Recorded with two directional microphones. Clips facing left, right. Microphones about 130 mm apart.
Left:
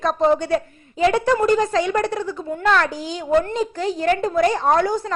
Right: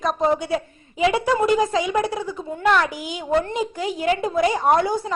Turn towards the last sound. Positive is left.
turn(degrees=-15)  # may be behind; listen again after turning